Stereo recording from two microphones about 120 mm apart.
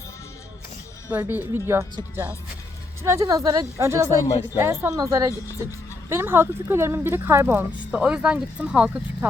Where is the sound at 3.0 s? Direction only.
25° right (ahead or behind).